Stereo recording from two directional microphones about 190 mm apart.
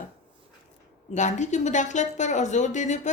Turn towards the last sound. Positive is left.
turn(degrees=40)  # may be behind; listen again after turning